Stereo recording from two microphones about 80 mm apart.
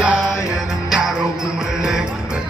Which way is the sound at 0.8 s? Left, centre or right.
Centre.